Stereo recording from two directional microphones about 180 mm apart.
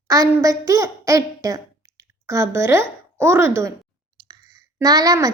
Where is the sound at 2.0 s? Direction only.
15° right (ahead or behind).